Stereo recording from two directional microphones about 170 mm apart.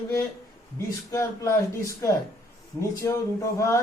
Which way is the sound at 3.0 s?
15° left (ahead or behind).